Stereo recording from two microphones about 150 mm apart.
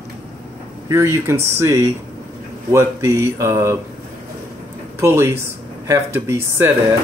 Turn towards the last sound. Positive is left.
turn(degrees=-15)  # may be behind; listen again after turning